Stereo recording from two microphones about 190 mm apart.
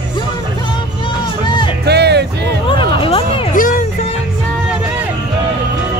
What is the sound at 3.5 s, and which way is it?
Music, 45° left (ahead or behind).